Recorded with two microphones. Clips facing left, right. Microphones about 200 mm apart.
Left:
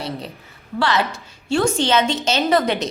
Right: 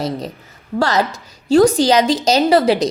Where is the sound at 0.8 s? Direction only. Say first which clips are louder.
Right 3 dB; 40° right (ahead or behind).